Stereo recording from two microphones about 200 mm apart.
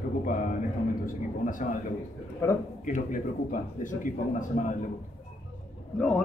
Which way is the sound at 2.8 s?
40° left (ahead or behind).